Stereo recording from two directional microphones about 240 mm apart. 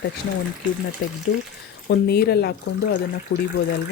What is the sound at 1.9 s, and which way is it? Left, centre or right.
Speech, left.